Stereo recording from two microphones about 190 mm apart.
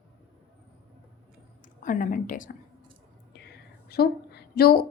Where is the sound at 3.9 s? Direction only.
55° left (ahead or behind).